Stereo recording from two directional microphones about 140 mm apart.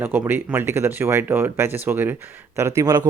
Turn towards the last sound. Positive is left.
turn(degrees=-25)  # may be behind; listen again after turning